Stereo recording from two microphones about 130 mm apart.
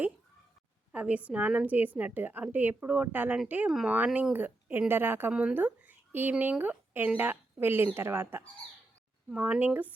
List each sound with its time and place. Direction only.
0.9 s speech: 10° right (ahead or behind)
3.7 s speech: centre (ahead or behind)